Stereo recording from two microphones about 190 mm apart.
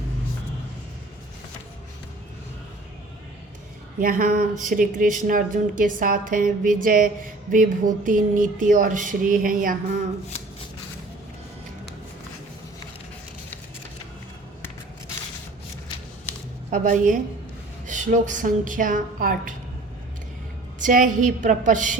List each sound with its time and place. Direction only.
4.0 s speech: 50° right (ahead or behind)
16.6 s speech: 45° right (ahead or behind)
20.8 s speech: 45° right (ahead or behind)